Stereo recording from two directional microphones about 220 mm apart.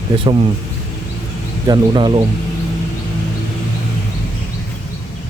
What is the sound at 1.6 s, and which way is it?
Speech, 20° right (ahead or behind).